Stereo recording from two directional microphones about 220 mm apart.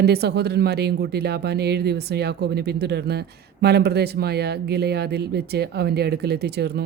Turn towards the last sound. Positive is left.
turn(degrees=-50)  # may be behind; listen again after turning